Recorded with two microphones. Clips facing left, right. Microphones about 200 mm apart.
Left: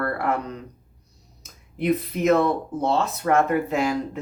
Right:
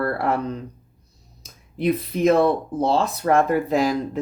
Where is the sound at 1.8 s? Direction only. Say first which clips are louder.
Right 2 dB; 30° right (ahead or behind).